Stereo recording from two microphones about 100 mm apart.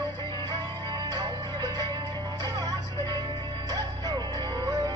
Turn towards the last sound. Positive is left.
turn(degrees=-40)  # may be behind; listen again after turning